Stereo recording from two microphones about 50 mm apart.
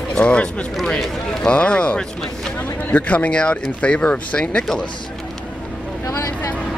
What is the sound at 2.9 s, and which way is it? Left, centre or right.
Speech, left.